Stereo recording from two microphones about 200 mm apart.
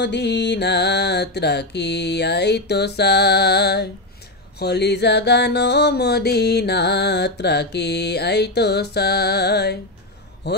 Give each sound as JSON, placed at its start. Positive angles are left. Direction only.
{"t": 0.0, "sound": "mantra", "side_deg": 60}
{"t": 10.4, "sound": "speech", "side_deg": 55}